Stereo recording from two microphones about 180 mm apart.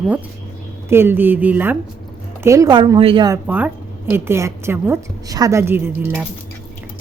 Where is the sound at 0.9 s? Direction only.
15° right (ahead or behind); by 3.2 s 30° right (ahead or behind).